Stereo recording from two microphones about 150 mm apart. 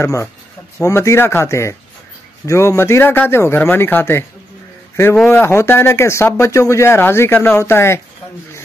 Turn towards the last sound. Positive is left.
turn(degrees=15)  # may be behind; listen again after turning